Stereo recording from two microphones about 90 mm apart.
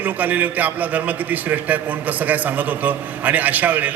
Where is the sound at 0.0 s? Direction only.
20° right (ahead or behind).